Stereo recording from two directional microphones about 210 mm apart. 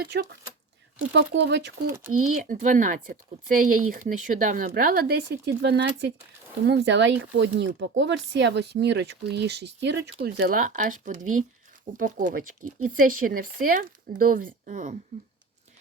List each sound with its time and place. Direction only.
0.0 s speech: 50° right (ahead or behind)
1.9 s speech: 10° right (ahead or behind)
2.4 s speech: 40° right (ahead or behind)